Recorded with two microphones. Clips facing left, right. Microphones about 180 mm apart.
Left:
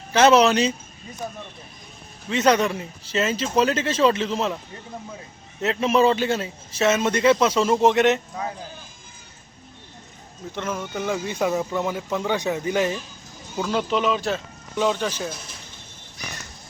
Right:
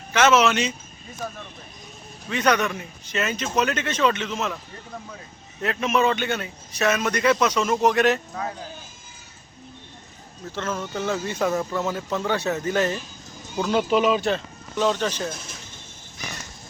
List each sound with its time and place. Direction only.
0.1 s a man's voice: 35° left (ahead or behind)
2.3 s a man's voice: 25° left (ahead or behind)
5.6 s a man's voice: 30° left (ahead or behind)
10.5 s speech: 15° left (ahead or behind)
13.6 s speech: centre (ahead or behind)